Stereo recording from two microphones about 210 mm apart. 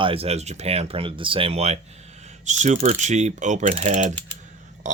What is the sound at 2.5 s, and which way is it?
Mechanisms, 30° right (ahead or behind).